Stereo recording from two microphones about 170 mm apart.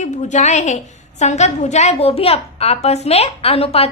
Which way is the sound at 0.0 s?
45° left (ahead or behind).